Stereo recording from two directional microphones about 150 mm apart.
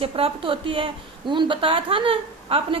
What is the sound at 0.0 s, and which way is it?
A woman's voice, 35° right (ahead or behind).